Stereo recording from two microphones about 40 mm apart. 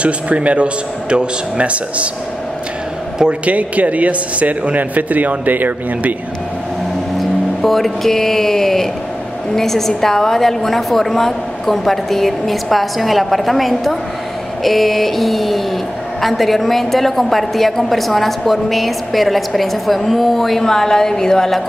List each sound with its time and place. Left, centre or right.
0.0 s speech: right
3.4 s speech: right
7.6 s a woman's voice: centre